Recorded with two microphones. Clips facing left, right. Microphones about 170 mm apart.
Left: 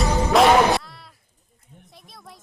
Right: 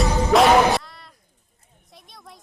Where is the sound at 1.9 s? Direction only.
Centre (ahead or behind).